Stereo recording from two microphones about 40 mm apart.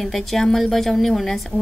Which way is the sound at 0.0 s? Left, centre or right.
Centre.